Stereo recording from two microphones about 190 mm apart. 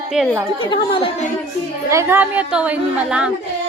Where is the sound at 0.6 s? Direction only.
25° left (ahead or behind).